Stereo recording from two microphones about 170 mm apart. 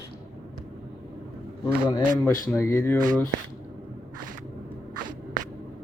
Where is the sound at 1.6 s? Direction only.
25° left (ahead or behind).